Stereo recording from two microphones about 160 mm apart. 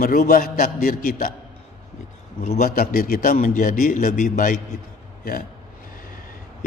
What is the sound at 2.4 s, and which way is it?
A man's voice, 55° left (ahead or behind).